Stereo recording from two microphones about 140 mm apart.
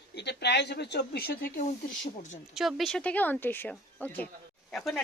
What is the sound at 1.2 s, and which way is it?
Speech, 90° left.